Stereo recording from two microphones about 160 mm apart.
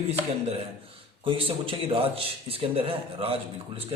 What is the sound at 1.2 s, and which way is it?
Speech, 35° right (ahead or behind).